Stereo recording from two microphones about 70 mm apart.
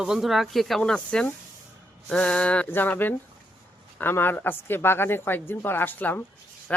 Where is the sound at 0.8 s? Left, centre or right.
Centre.